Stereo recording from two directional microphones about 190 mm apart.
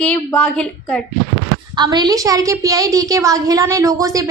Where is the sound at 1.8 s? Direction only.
20° right (ahead or behind).